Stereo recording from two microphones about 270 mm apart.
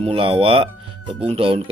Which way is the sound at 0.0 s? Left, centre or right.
Right.